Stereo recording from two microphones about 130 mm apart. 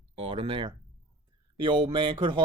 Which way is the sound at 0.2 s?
45° right (ahead or behind).